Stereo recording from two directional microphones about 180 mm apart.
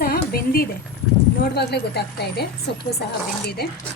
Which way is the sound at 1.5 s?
65° left (ahead or behind).